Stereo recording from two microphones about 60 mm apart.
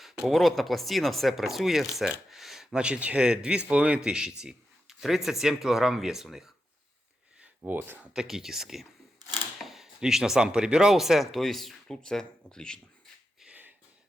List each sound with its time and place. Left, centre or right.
0.0 s speech: centre
2.7 s speech: centre
7.6 s speech: right
8.1 s speech: centre
13.5 s a sound: right